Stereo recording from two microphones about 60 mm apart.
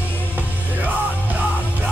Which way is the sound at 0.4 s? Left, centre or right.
Right.